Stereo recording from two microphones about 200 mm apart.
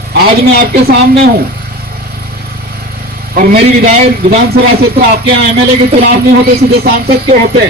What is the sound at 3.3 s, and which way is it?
A man's voice, 45° right (ahead or behind).